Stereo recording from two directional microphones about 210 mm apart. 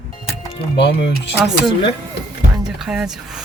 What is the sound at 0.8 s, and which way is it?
Speech, 55° left (ahead or behind).